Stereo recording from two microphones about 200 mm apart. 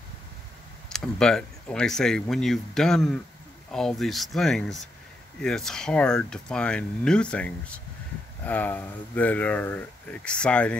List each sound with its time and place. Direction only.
0.8 s speech: 5° left (ahead or behind)